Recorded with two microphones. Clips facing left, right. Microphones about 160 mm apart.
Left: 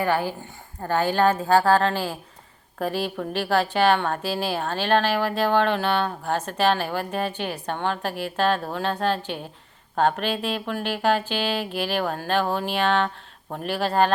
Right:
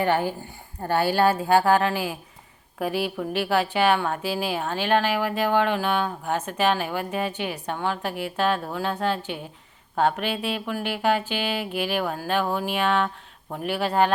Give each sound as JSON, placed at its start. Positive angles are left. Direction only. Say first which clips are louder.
{"t": 0.0, "sound": "speech", "louder": "right 1 dB", "side_deg": -20}